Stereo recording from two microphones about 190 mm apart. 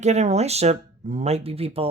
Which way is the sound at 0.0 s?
35° right (ahead or behind).